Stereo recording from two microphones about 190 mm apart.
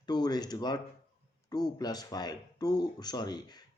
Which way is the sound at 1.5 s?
20° left (ahead or behind).